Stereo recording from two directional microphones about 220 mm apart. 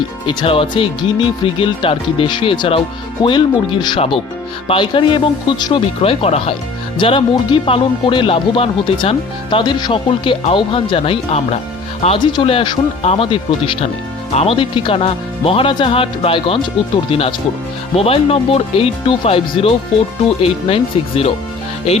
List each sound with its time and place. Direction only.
0.3 s speech: 25° left (ahead or behind)